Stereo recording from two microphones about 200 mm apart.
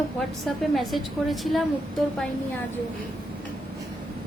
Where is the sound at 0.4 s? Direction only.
Centre (ahead or behind).